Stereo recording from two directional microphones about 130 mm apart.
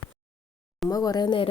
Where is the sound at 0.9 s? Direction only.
30° left (ahead or behind).